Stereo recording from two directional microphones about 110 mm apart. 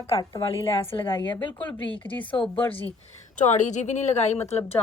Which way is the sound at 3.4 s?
90° left.